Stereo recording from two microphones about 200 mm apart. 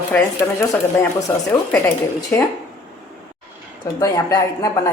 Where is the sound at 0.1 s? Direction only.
15° left (ahead or behind).